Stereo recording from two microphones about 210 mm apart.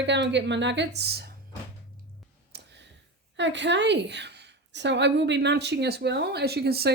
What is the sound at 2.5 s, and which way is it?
Clicking, 55° right (ahead or behind).